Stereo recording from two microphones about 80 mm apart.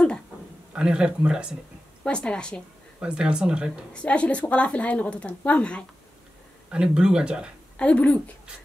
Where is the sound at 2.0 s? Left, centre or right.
Centre.